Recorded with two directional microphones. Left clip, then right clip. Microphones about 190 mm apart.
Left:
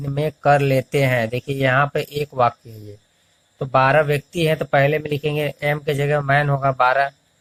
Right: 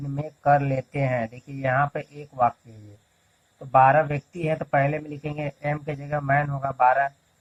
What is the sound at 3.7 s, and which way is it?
Speech, 60° left (ahead or behind).